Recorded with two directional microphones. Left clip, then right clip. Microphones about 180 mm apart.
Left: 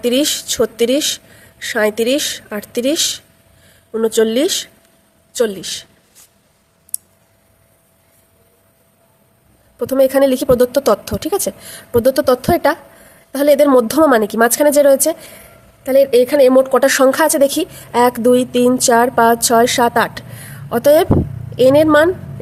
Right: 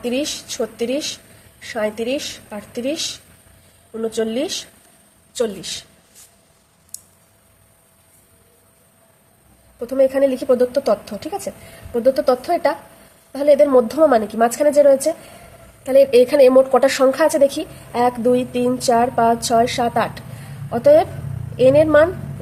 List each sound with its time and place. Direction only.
0.0 s a woman's voice: 40° left (ahead or behind)
5.3 s a man's voice: 30° left (ahead or behind)
6.9 s clicking: 30° left (ahead or behind)
9.7 s a woman's voice: 40° left (ahead or behind)
15.8 s a woman's voice: 20° left (ahead or behind)